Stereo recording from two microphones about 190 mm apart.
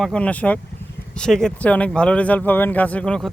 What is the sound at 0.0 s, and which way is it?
Speech, 5° left (ahead or behind).